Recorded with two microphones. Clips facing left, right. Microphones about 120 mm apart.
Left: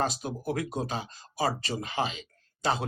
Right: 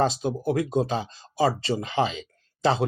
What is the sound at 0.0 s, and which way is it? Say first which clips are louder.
Speech: right 7 dB; 30° right (ahead or behind).